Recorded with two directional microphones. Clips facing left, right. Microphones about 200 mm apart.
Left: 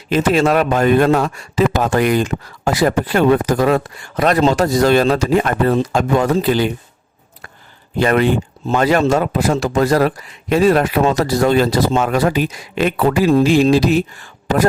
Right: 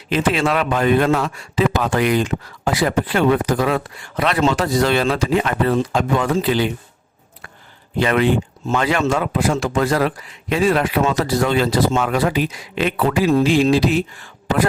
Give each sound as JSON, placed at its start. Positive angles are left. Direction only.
{"t": 0.1, "sound": "speech", "side_deg": 40}
{"t": 7.9, "sound": "speech", "side_deg": 45}